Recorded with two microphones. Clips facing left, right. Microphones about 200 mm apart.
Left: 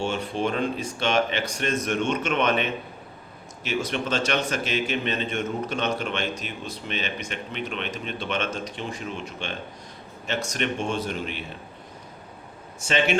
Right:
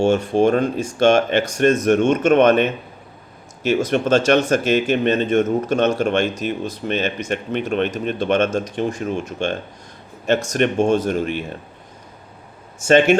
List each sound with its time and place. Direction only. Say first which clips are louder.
0.0 s a man's voice: right 11 dB; 45° right (ahead or behind)
12.8 s a man's voice: right 11 dB; 45° right (ahead or behind)